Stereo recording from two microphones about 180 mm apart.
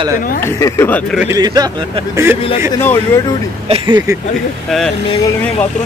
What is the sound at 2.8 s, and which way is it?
Speech, 10° left (ahead or behind).